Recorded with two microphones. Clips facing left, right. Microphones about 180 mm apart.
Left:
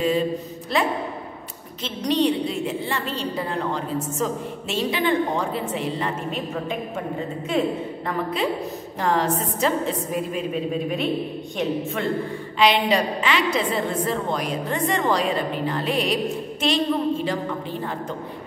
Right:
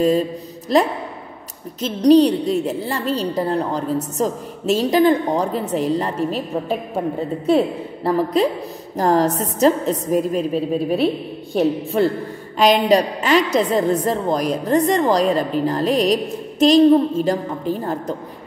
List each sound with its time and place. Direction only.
0.7 s a woman's voice: 40° right (ahead or behind)
7.4 s a woman's voice: 35° right (ahead or behind)